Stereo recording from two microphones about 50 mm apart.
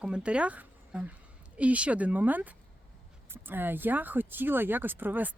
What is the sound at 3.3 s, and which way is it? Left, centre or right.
Speech, right.